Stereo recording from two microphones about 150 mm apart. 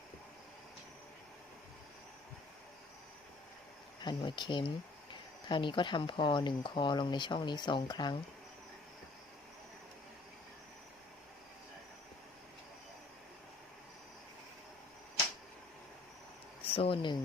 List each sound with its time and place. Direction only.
4.0 s speech: 30° left (ahead or behind)
16.6 s speech: 40° left (ahead or behind)